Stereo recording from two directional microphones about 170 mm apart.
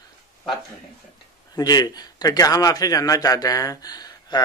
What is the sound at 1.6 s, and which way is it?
A man's voice, 25° left (ahead or behind).